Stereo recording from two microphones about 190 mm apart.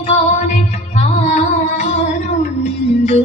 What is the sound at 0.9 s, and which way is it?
Music, 35° left (ahead or behind).